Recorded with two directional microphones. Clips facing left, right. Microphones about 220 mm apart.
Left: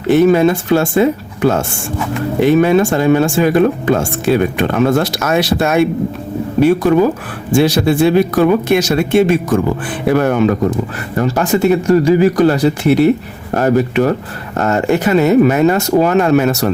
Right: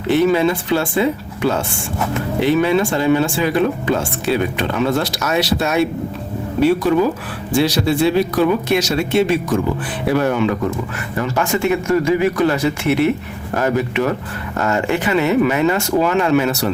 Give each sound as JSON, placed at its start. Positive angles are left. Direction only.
{"t": 0.1, "sound": "speech", "side_deg": 50}